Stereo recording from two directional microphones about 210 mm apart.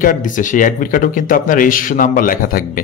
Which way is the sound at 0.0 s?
40° left (ahead or behind).